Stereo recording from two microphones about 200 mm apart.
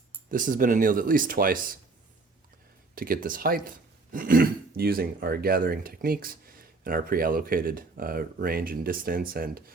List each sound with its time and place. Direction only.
0.3 s speech: 40° right (ahead or behind)
2.9 s speech: 45° right (ahead or behind)